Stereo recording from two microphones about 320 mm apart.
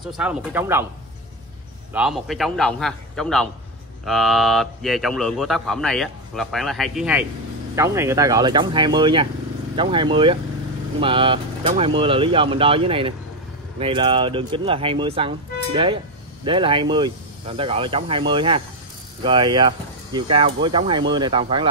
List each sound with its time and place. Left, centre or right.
0.0 s speech: centre
2.0 s speech: centre